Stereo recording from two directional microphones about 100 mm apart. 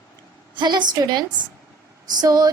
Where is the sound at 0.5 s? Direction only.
45° right (ahead or behind).